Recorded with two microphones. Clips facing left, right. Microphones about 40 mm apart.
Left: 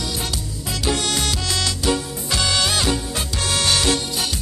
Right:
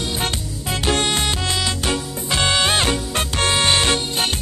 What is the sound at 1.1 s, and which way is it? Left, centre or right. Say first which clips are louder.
Music: right 2 dB; right.